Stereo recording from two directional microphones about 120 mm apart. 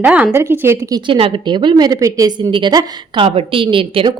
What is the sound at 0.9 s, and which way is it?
Speech, 45° right (ahead or behind).